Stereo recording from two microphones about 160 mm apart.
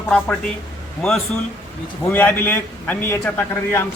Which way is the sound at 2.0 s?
10° left (ahead or behind).